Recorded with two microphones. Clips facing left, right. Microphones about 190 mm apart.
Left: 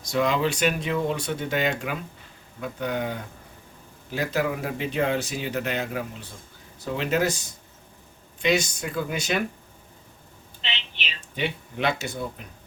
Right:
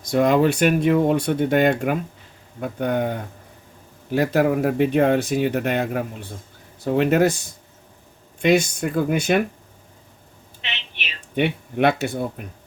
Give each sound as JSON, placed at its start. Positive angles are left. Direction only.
{"t": 0.0, "sound": "speech", "side_deg": -50}
{"t": 11.3, "sound": "speech", "side_deg": -55}